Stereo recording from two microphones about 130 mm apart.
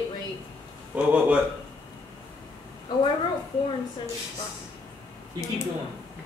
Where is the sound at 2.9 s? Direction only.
35° left (ahead or behind).